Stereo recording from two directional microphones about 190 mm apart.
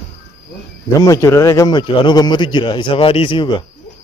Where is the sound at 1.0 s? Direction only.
15° left (ahead or behind).